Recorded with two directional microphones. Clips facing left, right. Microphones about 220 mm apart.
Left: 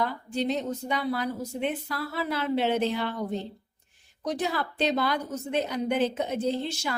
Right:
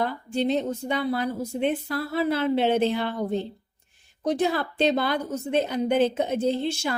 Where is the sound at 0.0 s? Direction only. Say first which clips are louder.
Right 3 dB; 25° right (ahead or behind).